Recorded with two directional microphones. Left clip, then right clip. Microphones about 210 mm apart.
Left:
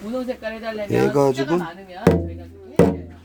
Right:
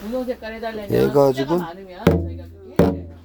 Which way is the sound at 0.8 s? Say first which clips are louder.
Right 2 dB; 5° right (ahead or behind).